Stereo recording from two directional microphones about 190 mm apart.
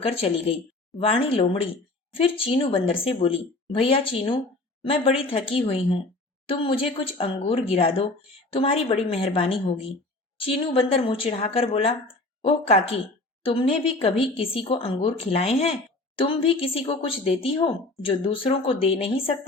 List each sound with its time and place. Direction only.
0.0 s speech: 30° left (ahead or behind)